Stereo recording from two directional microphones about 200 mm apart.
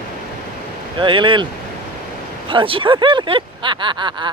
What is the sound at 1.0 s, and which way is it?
Speech, 25° right (ahead or behind).